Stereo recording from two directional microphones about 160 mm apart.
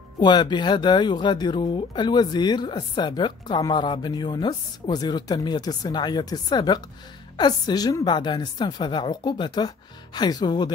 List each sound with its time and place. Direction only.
0.2 s speech: 30° left (ahead or behind)